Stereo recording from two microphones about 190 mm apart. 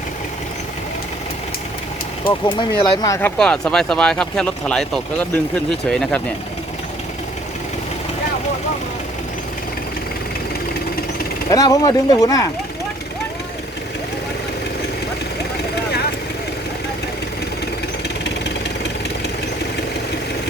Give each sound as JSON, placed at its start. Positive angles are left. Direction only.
{"t": 2.2, "sound": "speech", "side_deg": 25}
{"t": 3.2, "sound": "speech", "side_deg": 5}
{"t": 11.5, "sound": "speech", "side_deg": 20}